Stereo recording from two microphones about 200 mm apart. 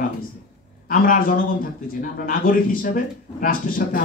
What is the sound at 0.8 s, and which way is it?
A man's voice, 45° left (ahead or behind).